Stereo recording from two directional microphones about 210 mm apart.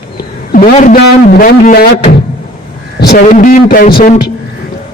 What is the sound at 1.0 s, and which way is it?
A man's voice, 45° left (ahead or behind).